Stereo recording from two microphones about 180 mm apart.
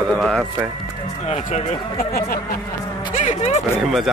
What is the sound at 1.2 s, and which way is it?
Speech, 40° left (ahead or behind).